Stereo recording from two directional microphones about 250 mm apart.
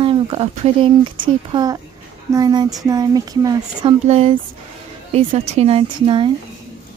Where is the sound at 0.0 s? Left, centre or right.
Right.